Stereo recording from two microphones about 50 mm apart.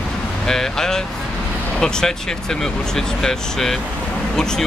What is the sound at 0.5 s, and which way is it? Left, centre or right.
Speech, centre.